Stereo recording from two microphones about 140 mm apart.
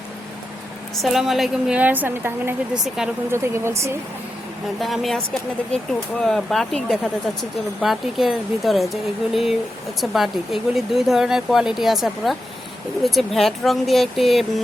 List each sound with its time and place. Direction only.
1.0 s a woman's voice: centre (ahead or behind)
2.8 s speech: 5° right (ahead or behind)
3.3 s speech: 20° right (ahead or behind)
4.8 s speech: centre (ahead or behind)